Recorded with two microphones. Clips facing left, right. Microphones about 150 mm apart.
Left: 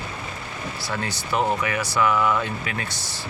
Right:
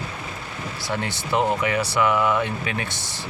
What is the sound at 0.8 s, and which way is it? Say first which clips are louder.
Speech: right 3 dB; 20° right (ahead or behind).